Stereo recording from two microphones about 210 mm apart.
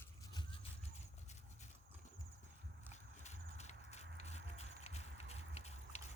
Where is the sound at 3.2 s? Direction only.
35° left (ahead or behind).